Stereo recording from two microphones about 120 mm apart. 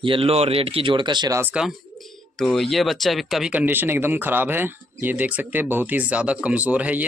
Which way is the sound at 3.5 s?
15° right (ahead or behind).